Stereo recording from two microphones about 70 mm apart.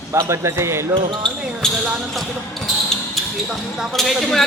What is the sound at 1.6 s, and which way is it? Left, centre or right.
Basketball bounce, centre.